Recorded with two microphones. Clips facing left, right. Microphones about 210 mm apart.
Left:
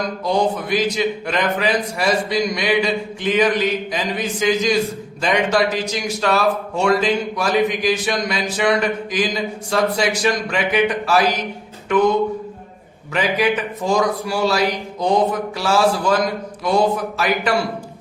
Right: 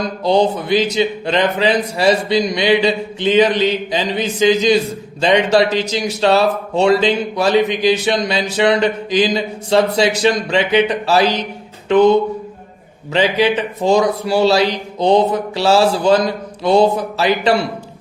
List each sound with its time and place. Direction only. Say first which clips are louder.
0.3 s a man's voice: right 5 dB; 25° right (ahead or behind)
13.1 s a man's voice: right 4 dB; 25° right (ahead or behind)